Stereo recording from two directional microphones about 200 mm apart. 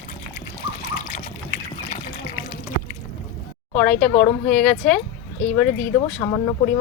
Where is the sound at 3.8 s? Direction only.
5° left (ahead or behind).